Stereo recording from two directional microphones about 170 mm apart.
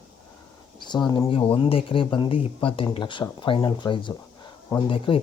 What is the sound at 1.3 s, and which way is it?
Speech, 35° left (ahead or behind).